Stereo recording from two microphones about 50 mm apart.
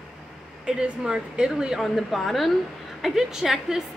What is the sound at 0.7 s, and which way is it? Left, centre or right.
A woman's voice, centre.